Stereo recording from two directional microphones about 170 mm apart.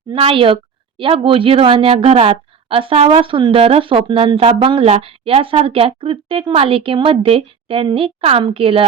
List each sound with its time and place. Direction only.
0.1 s speech: 30° right (ahead or behind)